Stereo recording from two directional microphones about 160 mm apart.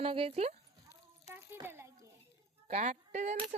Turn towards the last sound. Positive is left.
turn(degrees=-50)  # may be behind; listen again after turning